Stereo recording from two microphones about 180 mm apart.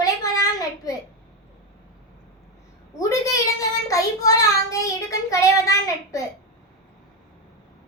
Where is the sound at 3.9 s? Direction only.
20° left (ahead or behind).